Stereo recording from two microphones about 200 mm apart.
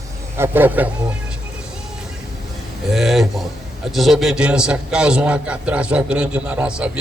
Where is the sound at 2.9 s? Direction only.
Centre (ahead or behind).